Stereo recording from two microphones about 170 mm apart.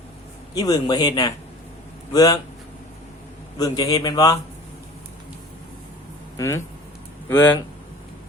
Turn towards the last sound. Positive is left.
turn(degrees=10)  # may be behind; listen again after turning